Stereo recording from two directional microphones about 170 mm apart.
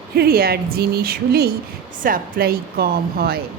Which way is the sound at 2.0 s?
55° right (ahead or behind).